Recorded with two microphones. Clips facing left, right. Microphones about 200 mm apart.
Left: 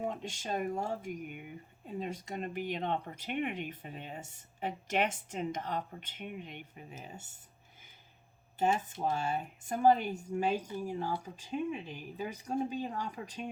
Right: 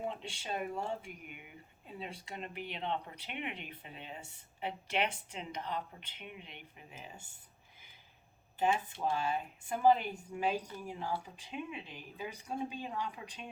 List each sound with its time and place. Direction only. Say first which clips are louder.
0.1 s speech: left 4 dB; 45° left (ahead or behind)
8.5 s speech: left 2 dB; 45° left (ahead or behind)